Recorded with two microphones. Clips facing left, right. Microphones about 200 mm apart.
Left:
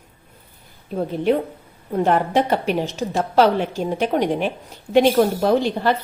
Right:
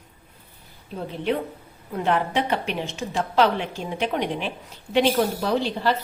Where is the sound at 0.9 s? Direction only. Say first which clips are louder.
Left 6 dB; 45° left (ahead or behind).